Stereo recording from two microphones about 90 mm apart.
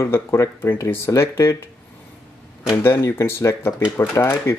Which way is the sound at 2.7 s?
30° left (ahead or behind).